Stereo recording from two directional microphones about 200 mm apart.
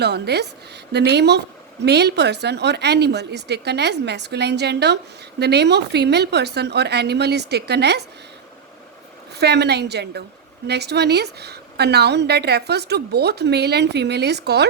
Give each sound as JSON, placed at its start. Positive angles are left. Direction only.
{"t": 0.0, "sound": "a woman's voice", "side_deg": -55}
{"t": 9.3, "sound": "a woman's voice", "side_deg": -55}